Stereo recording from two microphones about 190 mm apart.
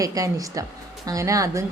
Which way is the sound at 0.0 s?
20° right (ahead or behind).